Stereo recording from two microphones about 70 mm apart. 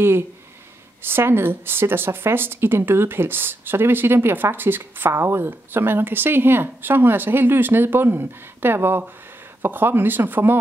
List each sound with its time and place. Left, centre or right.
1.0 s speech: right